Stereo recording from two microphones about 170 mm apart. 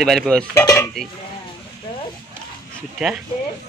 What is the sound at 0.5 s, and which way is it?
Dishes, 15° left (ahead or behind).